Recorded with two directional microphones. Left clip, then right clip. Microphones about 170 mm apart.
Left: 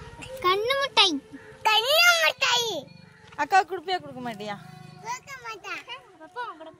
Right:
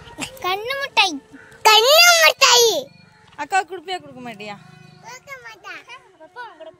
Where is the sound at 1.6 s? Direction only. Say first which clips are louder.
Right 9 dB; 80° right.